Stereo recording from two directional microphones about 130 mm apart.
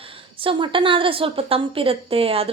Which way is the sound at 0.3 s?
40° right (ahead or behind).